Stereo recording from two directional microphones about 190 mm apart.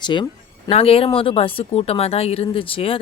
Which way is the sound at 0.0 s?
25° left (ahead or behind).